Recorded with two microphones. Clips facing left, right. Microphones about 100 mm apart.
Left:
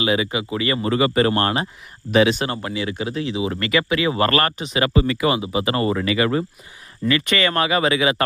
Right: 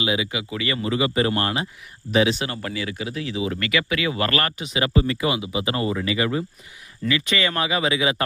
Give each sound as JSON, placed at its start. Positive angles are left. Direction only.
{"t": 0.0, "sound": "speech", "side_deg": 55}
{"t": 0.3, "sound": "speech", "side_deg": 35}
{"t": 2.0, "sound": "speech", "side_deg": 65}
{"t": 2.6, "sound": "speech", "side_deg": 25}
{"t": 4.8, "sound": "speech", "side_deg": 85}
{"t": 5.3, "sound": "speech", "side_deg": 45}
{"t": 5.6, "sound": "speech", "side_deg": 55}